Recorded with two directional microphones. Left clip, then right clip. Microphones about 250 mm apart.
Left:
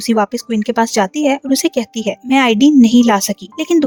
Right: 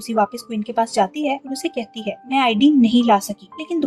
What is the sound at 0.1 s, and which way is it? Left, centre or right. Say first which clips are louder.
Speech: left 4 dB; left.